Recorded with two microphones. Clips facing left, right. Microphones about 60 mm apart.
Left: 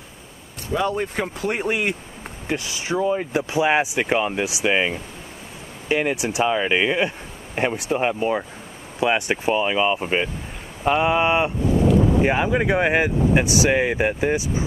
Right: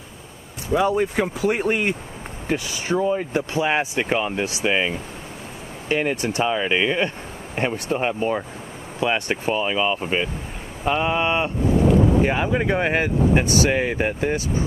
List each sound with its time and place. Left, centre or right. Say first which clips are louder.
0.7 s speech: right 3 dB; centre
1.0 s speech: right 4 dB; centre
3.2 s speech: left 1 dB; centre